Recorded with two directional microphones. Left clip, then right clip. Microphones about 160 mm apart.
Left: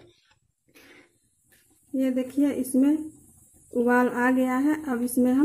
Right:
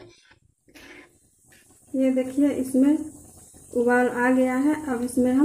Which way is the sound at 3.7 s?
50° left (ahead or behind).